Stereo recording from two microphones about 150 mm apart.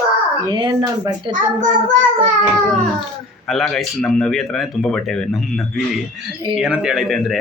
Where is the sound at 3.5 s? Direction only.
Centre (ahead or behind).